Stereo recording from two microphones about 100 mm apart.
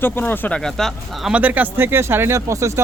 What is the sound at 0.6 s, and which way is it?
Speech, 5° left (ahead or behind).